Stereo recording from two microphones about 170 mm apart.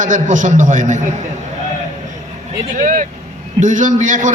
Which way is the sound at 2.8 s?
50° right (ahead or behind).